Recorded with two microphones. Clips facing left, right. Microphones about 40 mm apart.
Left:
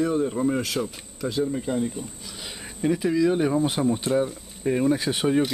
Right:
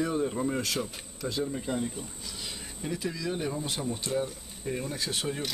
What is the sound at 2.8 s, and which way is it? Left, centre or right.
Speech, left.